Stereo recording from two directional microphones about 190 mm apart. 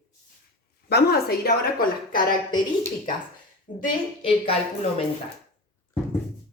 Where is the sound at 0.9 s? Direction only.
55° left (ahead or behind).